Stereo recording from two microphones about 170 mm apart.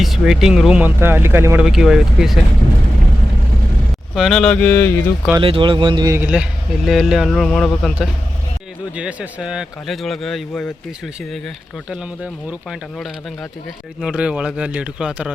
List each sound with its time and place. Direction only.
0.0 s speech: centre (ahead or behind)
1.6 s speech: 5° right (ahead or behind)
4.1 s speech: centre (ahead or behind)
5.4 s speech: 30° right (ahead or behind)
6.1 s speech: 5° right (ahead or behind)
9.0 s speech: 10° right (ahead or behind)
14.0 s speech: 5° right (ahead or behind)